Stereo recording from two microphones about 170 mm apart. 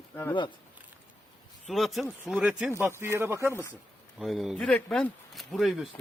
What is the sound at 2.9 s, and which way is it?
Speech, 15° right (ahead or behind).